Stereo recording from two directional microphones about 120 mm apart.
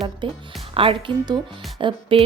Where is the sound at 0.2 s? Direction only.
45° right (ahead or behind).